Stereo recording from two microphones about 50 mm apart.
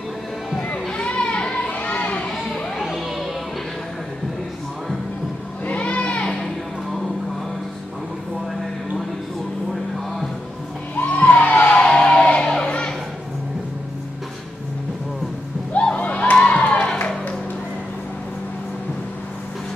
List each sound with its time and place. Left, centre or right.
0.9 s a sound: left
1.7 s children playing: left
2.8 s music: centre
5.7 s children playing: left
11.0 s music: left
11.8 s music: centre
15.7 s crowd: left